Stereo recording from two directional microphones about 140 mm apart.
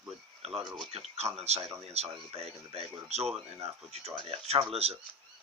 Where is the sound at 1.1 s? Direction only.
50° right (ahead or behind).